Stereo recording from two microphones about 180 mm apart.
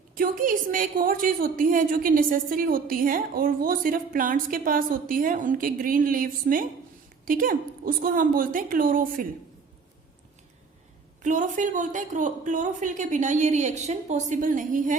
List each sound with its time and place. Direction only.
0.1 s a woman's voice: 50° right (ahead or behind)
11.2 s a woman's voice: 45° right (ahead or behind)